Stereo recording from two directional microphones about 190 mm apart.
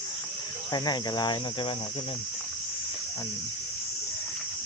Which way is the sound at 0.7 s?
20° left (ahead or behind).